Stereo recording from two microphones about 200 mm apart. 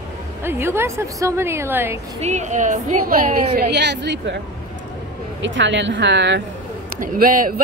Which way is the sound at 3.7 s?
60° right (ahead or behind).